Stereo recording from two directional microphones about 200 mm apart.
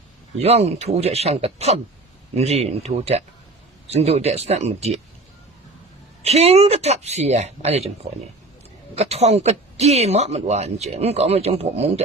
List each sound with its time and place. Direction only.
0.4 s speech: 30° right (ahead or behind)
6.2 s speech: 30° right (ahead or behind)
9.0 s speech: 30° right (ahead or behind)